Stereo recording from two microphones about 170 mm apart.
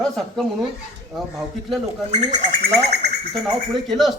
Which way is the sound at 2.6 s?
75° right (ahead or behind).